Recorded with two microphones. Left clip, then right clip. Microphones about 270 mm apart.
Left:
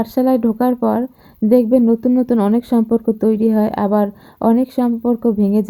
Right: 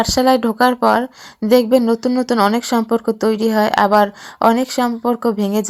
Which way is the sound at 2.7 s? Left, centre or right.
Right.